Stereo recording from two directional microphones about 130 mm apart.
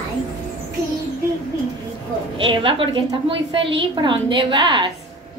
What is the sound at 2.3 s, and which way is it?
A woman's voice, 40° right (ahead or behind).